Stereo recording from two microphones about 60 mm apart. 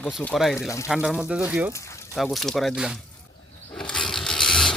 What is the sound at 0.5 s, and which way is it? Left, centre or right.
Speech, left.